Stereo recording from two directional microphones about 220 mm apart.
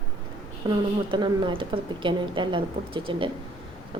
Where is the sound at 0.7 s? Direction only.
20° right (ahead or behind).